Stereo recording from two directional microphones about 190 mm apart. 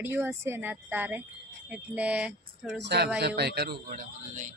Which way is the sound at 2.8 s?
60° right (ahead or behind).